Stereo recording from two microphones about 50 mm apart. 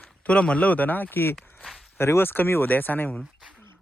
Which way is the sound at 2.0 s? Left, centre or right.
Left.